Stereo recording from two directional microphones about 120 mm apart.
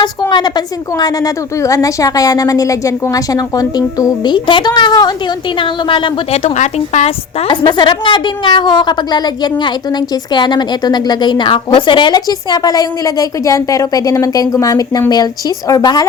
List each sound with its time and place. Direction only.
0.0 s a woman's voice: 35° left (ahead or behind)
6.3 s a woman's voice: 60° left (ahead or behind)
7.5 s a woman's voice: 45° left (ahead or behind)